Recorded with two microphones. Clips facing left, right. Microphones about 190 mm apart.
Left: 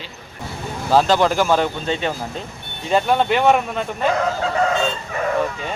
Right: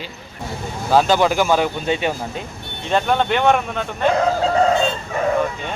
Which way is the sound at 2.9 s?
5° left (ahead or behind).